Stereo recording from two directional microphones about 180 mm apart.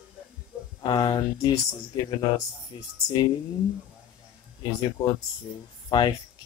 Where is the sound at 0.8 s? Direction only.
25° left (ahead or behind).